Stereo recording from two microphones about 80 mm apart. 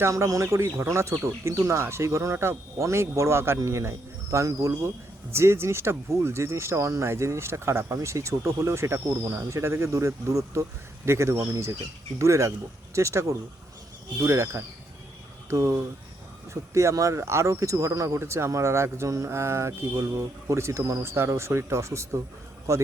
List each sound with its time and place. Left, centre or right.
0.0 s speech: right